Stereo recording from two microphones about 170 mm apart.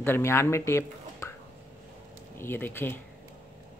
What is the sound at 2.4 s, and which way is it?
Speech, 15° left (ahead or behind).